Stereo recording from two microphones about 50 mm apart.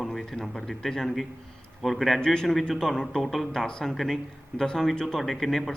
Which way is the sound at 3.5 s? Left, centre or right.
Centre.